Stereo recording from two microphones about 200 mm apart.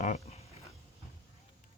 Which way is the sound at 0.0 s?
40° left (ahead or behind).